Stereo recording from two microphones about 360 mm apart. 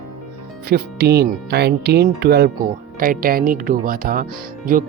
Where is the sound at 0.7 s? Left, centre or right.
Right.